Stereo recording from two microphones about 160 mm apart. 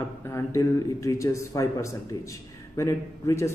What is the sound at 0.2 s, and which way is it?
Speech, 15° left (ahead or behind).